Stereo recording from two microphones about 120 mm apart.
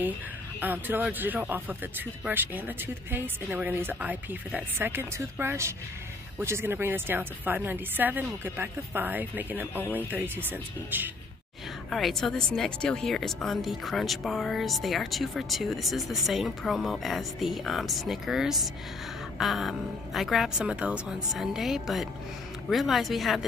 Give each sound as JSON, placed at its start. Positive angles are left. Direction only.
{"t": 0.6, "sound": "a woman's voice", "side_deg": -15}
{"t": 11.9, "sound": "speech", "side_deg": 0}
{"t": 19.3, "sound": "a sound", "side_deg": 0}
{"t": 20.2, "sound": "speech", "side_deg": 0}